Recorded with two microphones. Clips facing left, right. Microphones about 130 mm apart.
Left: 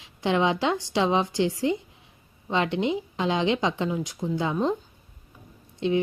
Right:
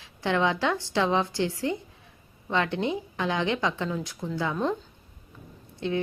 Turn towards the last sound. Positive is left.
turn(degrees=20)  # may be behind; listen again after turning